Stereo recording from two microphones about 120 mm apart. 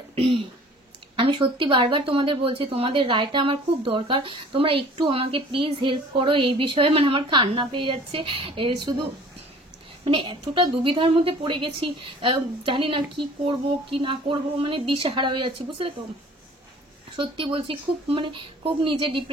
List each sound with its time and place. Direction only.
0.1 s a sound: 50° right (ahead or behind)
1.1 s speech: 45° right (ahead or behind)
10.0 s speech: 45° right (ahead or behind)
17.2 s speech: 45° right (ahead or behind)